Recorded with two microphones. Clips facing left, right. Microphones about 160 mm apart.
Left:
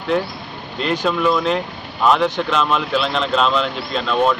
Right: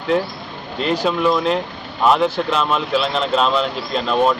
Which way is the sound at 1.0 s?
5° right (ahead or behind).